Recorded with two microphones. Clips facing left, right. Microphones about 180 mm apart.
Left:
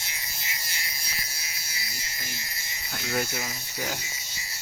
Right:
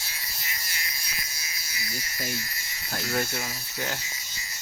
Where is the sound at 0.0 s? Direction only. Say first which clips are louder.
Even; 20° left (ahead or behind).